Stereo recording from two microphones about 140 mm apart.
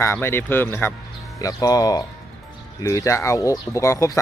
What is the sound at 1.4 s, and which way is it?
Speech, 25° left (ahead or behind).